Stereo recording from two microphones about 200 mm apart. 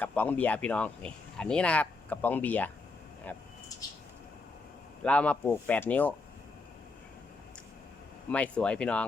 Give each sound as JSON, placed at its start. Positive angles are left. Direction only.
{"t": 0.0, "sound": "speech", "side_deg": 10}
{"t": 3.8, "sound": "a sound", "side_deg": 15}
{"t": 5.0, "sound": "speech", "side_deg": 5}
{"t": 8.3, "sound": "speech", "side_deg": 5}